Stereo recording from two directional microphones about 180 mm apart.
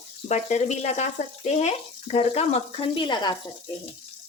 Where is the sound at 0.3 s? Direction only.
40° left (ahead or behind).